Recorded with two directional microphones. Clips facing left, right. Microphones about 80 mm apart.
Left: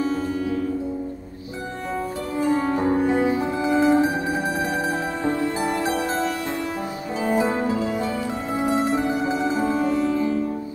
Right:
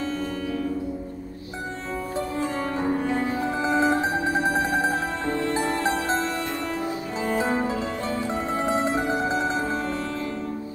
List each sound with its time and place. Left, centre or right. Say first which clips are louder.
0.0 s music: left 4 dB; centre
2.3 s music: left 9 dB; centre
5.2 s music: left 4 dB; centre
7.2 s music: left 3 dB; centre
8.8 s music: left 2 dB; right
9.5 s music: left 5 dB; centre